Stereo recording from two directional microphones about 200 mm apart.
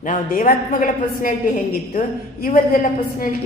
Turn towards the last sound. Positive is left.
turn(degrees=45)  # may be behind; listen again after turning